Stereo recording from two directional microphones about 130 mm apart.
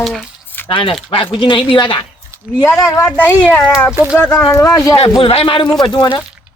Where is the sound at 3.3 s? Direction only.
15° left (ahead or behind).